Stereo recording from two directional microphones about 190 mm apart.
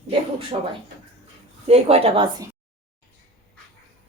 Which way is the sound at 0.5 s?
30° right (ahead or behind).